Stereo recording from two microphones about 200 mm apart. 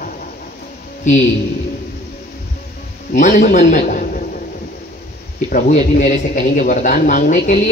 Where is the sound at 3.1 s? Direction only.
40° left (ahead or behind).